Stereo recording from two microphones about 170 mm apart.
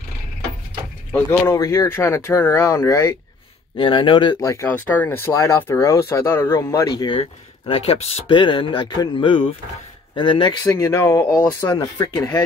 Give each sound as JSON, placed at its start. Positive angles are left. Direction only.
{"t": 1.4, "sound": "speech", "side_deg": 15}
{"t": 3.7, "sound": "speech", "side_deg": 30}
{"t": 7.2, "sound": "speech", "side_deg": 35}